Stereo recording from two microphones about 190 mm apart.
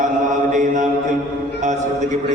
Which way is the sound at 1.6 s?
40° right (ahead or behind).